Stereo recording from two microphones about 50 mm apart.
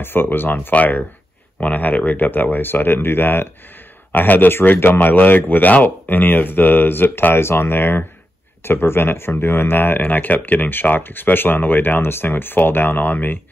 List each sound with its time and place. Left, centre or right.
0.0 s speech: left
4.1 s speech: left